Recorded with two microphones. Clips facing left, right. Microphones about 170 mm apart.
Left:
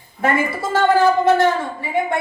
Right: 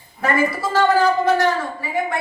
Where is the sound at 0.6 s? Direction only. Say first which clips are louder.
Left 3 dB; 25° left (ahead or behind).